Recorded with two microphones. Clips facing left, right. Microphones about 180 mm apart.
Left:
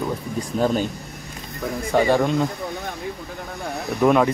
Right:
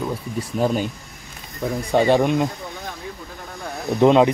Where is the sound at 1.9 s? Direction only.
20° right (ahead or behind).